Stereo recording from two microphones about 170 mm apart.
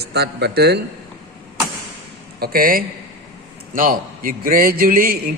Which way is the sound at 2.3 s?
60° right (ahead or behind).